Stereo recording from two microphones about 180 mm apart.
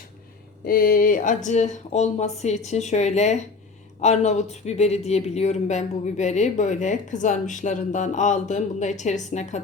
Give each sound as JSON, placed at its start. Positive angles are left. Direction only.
{"t": 0.6, "sound": "speech", "side_deg": 55}